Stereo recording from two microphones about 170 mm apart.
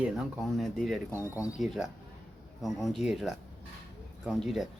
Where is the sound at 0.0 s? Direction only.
5° right (ahead or behind).